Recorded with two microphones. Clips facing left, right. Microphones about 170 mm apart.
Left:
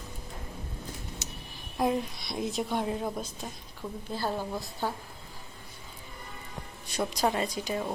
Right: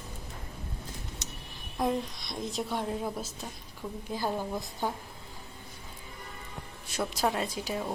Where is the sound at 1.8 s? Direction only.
5° left (ahead or behind).